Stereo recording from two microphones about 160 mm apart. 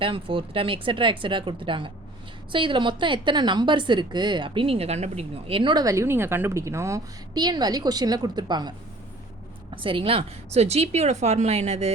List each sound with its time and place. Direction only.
0.0 s a woman's voice: 35° right (ahead or behind)
9.7 s speech: 30° right (ahead or behind)